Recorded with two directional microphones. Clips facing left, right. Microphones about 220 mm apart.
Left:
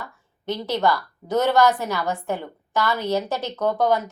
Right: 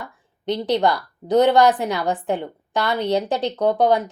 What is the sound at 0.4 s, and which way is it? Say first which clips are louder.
A woman's voice: right 3 dB; 15° right (ahead or behind).